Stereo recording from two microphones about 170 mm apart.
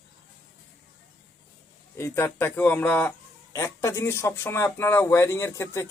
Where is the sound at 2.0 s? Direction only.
15° left (ahead or behind).